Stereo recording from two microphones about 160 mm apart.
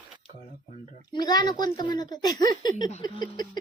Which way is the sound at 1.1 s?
25° left (ahead or behind).